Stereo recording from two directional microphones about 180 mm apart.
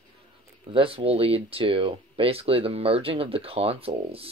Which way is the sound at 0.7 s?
30° right (ahead or behind).